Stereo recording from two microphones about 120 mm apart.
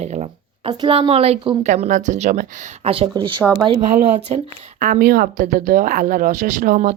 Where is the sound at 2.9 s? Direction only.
50° right (ahead or behind).